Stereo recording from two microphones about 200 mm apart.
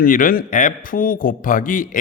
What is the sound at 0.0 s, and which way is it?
A man's voice, 45° left (ahead or behind).